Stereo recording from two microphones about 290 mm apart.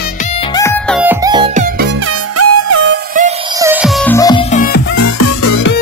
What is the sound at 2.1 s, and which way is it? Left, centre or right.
Music, right.